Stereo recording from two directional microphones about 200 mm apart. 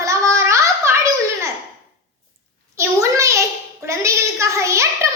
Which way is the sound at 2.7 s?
15° right (ahead or behind).